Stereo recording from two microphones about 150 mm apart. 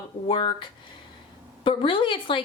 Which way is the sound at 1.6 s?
35° left (ahead or behind).